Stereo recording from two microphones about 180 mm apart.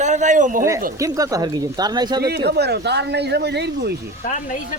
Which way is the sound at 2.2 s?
65° right (ahead or behind).